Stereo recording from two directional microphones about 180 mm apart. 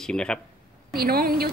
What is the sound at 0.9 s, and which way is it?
Speech, 60° right (ahead or behind).